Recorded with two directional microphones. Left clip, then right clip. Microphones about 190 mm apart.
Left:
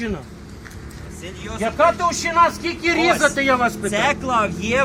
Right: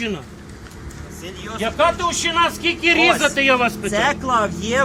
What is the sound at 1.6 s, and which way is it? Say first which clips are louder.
Speech: left 1 dB; centre (ahead or behind).